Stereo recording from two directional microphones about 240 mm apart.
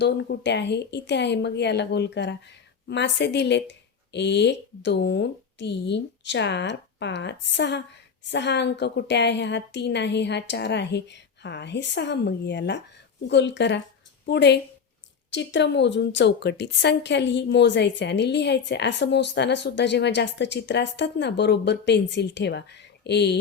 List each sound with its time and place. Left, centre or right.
0.0 s a woman's voice: left